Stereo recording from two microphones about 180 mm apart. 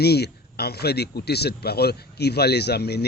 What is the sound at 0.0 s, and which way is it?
A man's voice, 65° left (ahead or behind).